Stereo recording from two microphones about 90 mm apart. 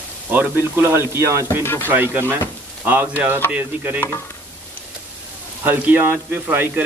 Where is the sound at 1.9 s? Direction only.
25° right (ahead or behind).